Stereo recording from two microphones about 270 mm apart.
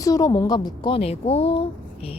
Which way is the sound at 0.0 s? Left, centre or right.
Centre.